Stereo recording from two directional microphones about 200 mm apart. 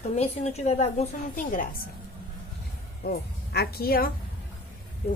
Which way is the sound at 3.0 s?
50° left (ahead or behind).